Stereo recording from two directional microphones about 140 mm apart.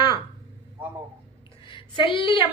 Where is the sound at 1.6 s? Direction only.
35° left (ahead or behind).